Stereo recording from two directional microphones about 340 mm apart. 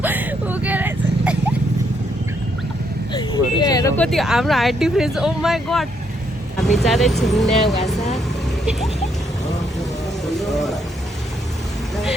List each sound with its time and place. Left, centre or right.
0.0 s vehicle: centre
3.1 s speech: centre
7.9 s speech: centre
10.5 s speech: centre